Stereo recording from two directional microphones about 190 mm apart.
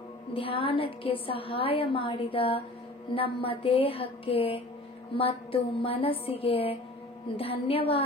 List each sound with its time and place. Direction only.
0.3 s a woman's voice: 30° left (ahead or behind)